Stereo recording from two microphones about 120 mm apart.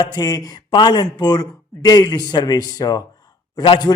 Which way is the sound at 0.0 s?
35° left (ahead or behind).